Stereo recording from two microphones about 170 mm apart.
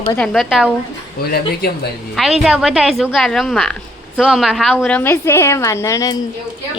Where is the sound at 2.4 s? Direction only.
5° right (ahead or behind).